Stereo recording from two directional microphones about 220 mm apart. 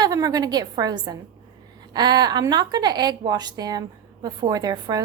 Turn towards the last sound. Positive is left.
turn(degrees=-15)  # may be behind; listen again after turning